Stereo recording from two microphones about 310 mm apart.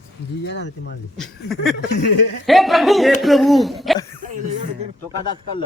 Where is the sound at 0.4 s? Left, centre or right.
Left.